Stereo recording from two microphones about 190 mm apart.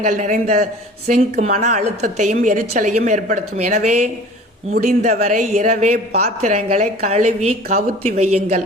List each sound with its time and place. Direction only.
0.0 s speech: 40° right (ahead or behind)
6.1 s a woman's voice: 55° right (ahead or behind)
6.5 s speech: 40° right (ahead or behind)